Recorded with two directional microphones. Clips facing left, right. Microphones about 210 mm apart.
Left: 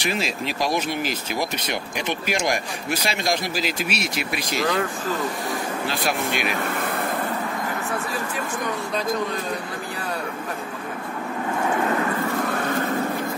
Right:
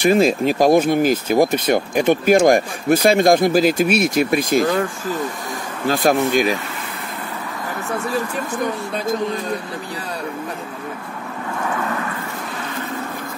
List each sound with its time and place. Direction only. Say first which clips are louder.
0.0 s speech: right 11 dB; 50° right (ahead or behind)
5.9 s speech: right 11 dB; 45° right (ahead or behind)
6.6 s vehicle: left 5 dB; 55° left (ahead or behind)
12.4 s vehicle: left 4 dB; 55° left (ahead or behind)